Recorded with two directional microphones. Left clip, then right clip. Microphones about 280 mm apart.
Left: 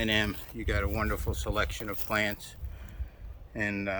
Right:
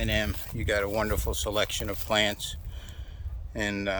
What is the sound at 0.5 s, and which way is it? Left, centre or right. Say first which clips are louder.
Speech: right 7 dB; centre.